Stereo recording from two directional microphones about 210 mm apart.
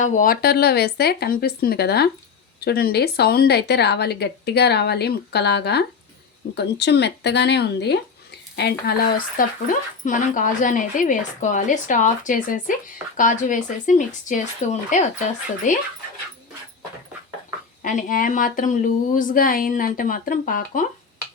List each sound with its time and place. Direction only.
0.0 s a woman's voice: 40° left (ahead or behind)
17.8 s speech: 40° left (ahead or behind)